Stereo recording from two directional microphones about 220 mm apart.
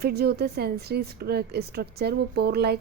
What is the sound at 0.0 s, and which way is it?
A woman's voice, 45° right (ahead or behind).